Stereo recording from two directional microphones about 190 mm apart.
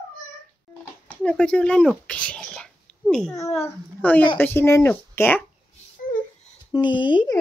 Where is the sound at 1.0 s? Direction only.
5° left (ahead or behind).